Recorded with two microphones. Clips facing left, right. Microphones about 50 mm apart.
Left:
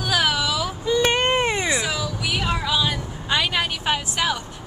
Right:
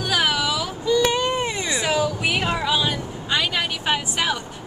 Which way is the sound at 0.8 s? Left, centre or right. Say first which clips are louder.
Right 1 dB; left.